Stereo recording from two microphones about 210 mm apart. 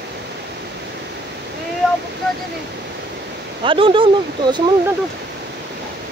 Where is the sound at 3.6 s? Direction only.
25° right (ahead or behind).